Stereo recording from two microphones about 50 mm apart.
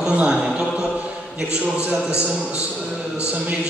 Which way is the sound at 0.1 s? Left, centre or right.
Right.